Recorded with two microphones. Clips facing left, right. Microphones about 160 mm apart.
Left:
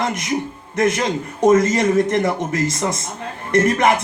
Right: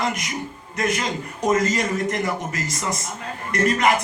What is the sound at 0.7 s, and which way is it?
A man's voice, 25° left (ahead or behind).